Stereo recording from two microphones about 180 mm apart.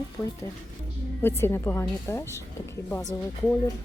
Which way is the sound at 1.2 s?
15° left (ahead or behind).